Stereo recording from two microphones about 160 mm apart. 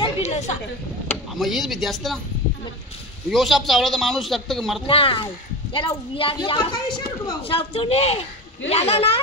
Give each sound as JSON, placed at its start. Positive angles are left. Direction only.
{"t": 0.0, "sound": "a sound", "side_deg": 45}
{"t": 1.3, "sound": "a man's voice", "side_deg": 0}
{"t": 3.3, "sound": "a man's voice", "side_deg": 0}
{"t": 4.8, "sound": "speech", "side_deg": 35}